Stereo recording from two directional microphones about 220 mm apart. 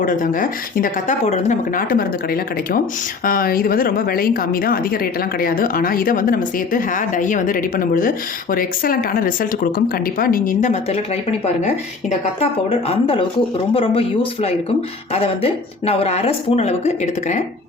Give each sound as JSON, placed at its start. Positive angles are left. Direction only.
{"t": 0.0, "sound": "a woman's voice", "side_deg": 40}